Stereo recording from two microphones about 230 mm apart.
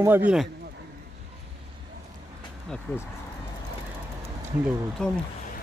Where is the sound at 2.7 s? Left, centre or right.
Centre.